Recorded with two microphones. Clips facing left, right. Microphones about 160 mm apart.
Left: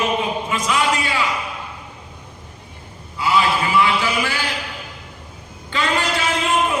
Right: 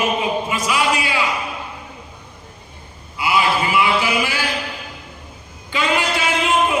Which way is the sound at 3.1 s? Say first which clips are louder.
Even; 10° right (ahead or behind).